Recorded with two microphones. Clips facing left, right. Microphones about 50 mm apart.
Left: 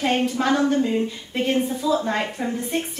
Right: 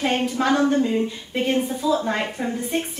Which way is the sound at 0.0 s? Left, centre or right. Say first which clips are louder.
Even; centre.